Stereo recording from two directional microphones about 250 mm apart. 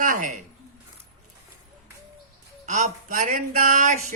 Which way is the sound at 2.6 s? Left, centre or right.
Right.